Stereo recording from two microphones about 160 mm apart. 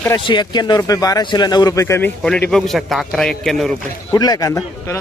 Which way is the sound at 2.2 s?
5° left (ahead or behind).